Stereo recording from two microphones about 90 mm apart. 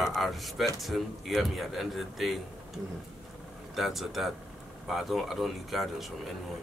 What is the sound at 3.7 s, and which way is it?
A man's voice, centre (ahead or behind).